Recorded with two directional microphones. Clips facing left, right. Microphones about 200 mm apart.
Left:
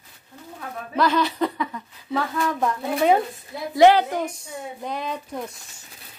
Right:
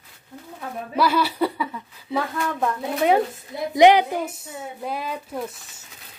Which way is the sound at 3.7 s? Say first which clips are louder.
Even; 15° right (ahead or behind).